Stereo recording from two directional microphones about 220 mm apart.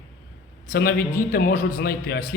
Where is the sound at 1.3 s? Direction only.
40° left (ahead or behind).